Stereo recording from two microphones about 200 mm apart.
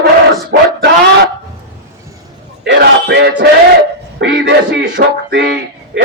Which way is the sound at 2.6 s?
55° right (ahead or behind).